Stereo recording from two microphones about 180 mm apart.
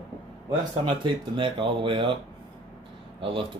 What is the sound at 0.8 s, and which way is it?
Speech, 30° right (ahead or behind).